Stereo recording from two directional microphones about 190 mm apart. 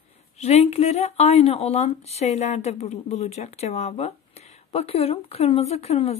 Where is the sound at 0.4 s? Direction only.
35° left (ahead or behind).